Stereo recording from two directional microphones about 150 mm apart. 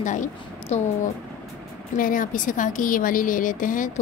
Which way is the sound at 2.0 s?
65° left (ahead or behind).